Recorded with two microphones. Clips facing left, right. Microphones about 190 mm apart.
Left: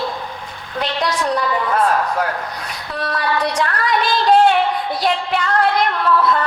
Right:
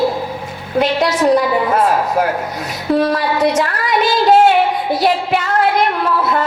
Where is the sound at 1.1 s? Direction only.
25° right (ahead or behind).